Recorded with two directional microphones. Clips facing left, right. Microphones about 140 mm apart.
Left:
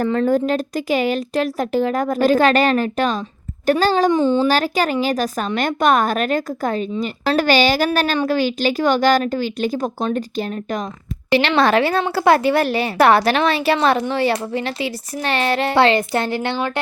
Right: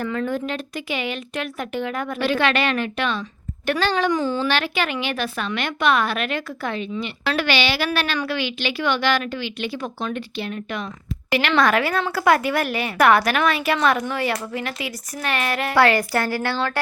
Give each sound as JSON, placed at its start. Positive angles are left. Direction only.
{"t": 0.0, "sound": "a woman's voice", "side_deg": 40}
{"t": 4.1, "sound": "a woman's voice", "side_deg": 25}
{"t": 4.4, "sound": "a woman's voice", "side_deg": 40}
{"t": 11.3, "sound": "a woman's voice", "side_deg": 30}